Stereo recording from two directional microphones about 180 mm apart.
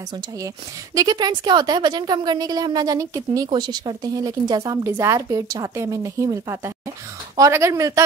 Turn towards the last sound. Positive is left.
turn(degrees=-15)  # may be behind; listen again after turning